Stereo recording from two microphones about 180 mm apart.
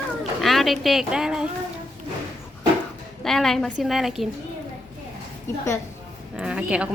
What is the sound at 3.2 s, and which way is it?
A woman's voice, centre (ahead or behind).